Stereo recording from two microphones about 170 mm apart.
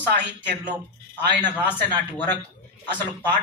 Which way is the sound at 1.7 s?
10° left (ahead or behind).